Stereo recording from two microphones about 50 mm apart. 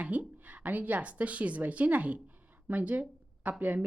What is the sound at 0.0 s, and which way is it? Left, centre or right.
Speech, right.